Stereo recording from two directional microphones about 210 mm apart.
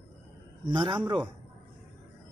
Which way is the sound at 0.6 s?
25° right (ahead or behind).